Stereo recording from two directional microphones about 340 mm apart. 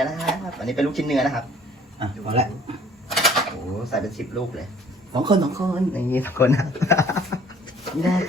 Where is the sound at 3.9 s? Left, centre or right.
Centre.